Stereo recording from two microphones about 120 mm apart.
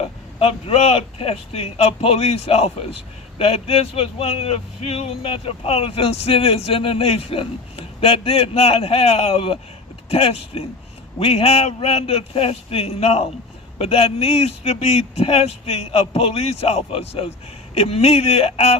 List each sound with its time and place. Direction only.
0.0 s speech: 55° left (ahead or behind)